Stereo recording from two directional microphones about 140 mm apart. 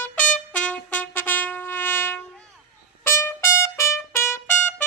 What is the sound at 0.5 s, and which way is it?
Brass instrument, 10° left (ahead or behind).